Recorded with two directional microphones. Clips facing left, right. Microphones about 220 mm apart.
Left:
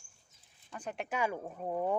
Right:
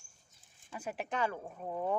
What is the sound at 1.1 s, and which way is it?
Speech, 10° left (ahead or behind).